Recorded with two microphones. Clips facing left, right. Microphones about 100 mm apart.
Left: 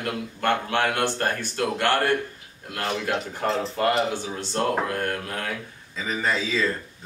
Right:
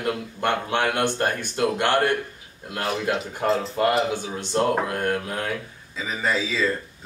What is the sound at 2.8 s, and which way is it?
Speech, 5° right (ahead or behind).